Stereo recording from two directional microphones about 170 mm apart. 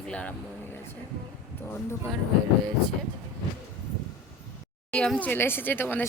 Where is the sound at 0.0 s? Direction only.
5° left (ahead or behind).